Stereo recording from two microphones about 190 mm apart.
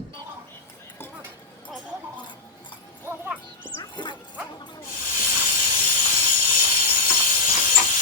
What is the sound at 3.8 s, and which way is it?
Music, 25° left (ahead or behind).